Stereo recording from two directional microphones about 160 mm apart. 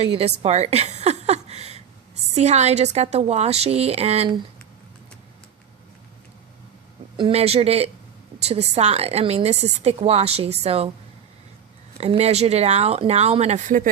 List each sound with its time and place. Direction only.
0.0 s a woman's voice: 40° right (ahead or behind)
7.2 s a woman's voice: 35° right (ahead or behind)
11.9 s a woman's voice: 40° right (ahead or behind); by 13.9 s 55° right (ahead or behind)